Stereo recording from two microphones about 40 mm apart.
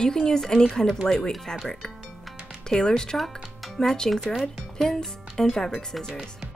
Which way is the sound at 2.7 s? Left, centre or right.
Centre.